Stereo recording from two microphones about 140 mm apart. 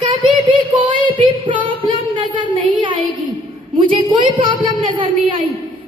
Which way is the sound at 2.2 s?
35° right (ahead or behind).